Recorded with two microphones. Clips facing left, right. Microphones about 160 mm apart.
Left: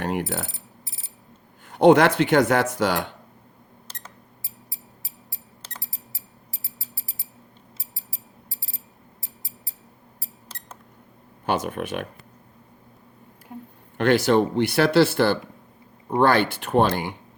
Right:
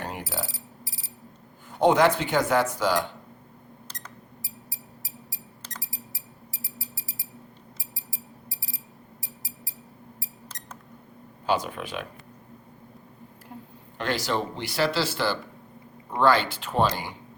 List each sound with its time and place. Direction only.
0.0 s alarm: 70° left (ahead or behind)
1.6 s speech: 65° left (ahead or behind)
5.6 s a sound: 25° left (ahead or behind)
7.9 s clock: 25° left (ahead or behind)
9.2 s a sound: 25° left (ahead or behind)
11.4 s speech: 60° left (ahead or behind)
14.0 s speech: 60° left (ahead or behind)